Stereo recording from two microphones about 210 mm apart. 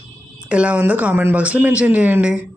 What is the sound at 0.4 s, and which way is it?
Speech, 5° right (ahead or behind).